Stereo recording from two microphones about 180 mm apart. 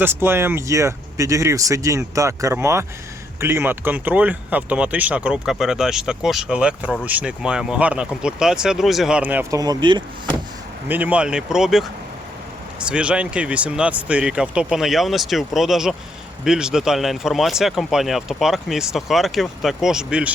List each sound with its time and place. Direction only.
0.0 s speech: 15° right (ahead or behind)
10.8 s speech: 10° right (ahead or behind)
12.9 s speech: 5° right (ahead or behind)